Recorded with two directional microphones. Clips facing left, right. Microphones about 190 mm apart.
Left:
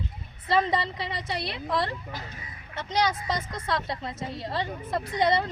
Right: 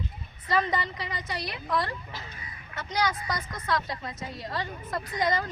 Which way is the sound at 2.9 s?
25° left (ahead or behind).